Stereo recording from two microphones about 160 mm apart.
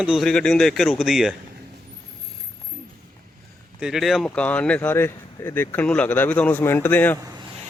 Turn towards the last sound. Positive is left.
turn(degrees=10)  # may be behind; listen again after turning